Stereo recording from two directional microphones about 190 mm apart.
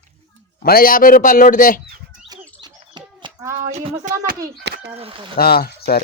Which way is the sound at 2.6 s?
20° right (ahead or behind).